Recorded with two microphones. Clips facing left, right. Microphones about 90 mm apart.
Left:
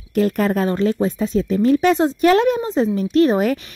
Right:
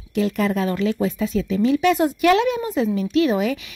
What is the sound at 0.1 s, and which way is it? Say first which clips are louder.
A woman's voice: left 3 dB; 45° left (ahead or behind).